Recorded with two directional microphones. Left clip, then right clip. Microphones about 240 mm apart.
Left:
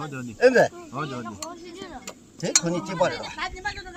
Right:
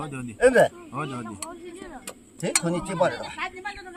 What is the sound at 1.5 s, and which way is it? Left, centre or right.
Dishes, left.